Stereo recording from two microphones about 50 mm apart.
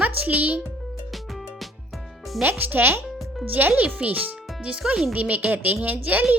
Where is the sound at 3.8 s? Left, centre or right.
Right.